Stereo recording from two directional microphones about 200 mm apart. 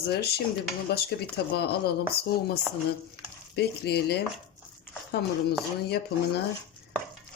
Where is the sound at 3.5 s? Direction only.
55° left (ahead or behind).